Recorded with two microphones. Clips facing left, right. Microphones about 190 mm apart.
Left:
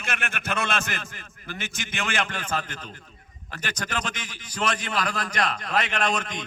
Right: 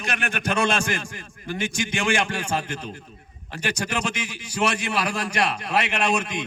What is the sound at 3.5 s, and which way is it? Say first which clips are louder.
A man's voice: right 4 dB; 10° right (ahead or behind).